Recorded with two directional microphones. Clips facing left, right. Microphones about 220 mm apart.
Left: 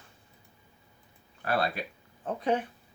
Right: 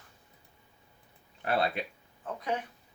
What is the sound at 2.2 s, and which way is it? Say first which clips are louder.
Speech: left 6 dB; 30° left (ahead or behind).